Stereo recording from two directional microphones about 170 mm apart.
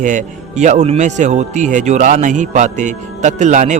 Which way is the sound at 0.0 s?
45° right (ahead or behind).